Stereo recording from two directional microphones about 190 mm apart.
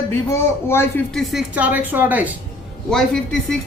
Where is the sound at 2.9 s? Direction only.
5° left (ahead or behind).